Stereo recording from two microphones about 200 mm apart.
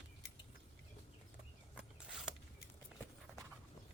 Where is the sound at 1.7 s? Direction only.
5° right (ahead or behind).